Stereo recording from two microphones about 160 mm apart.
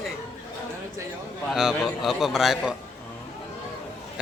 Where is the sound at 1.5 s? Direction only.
5° right (ahead or behind).